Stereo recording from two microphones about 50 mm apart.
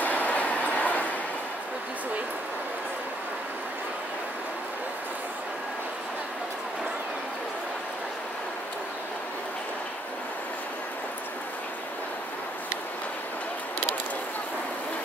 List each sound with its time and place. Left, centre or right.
0.0 s train: left